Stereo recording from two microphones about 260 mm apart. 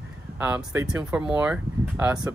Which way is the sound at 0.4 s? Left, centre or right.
Centre.